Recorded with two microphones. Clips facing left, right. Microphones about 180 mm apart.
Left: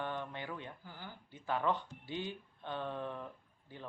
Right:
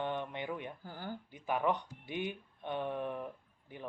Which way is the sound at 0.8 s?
45° right (ahead or behind).